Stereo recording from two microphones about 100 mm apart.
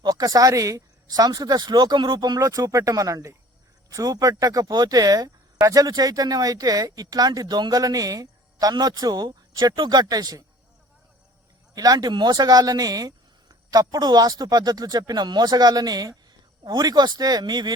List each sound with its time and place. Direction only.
0.0 s speech: 40° right (ahead or behind)
11.7 s speech: 40° right (ahead or behind)